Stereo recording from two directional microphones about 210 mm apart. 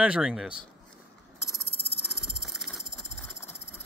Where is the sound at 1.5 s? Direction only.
45° left (ahead or behind).